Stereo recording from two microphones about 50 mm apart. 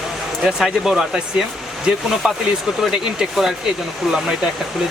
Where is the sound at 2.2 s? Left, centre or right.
Right.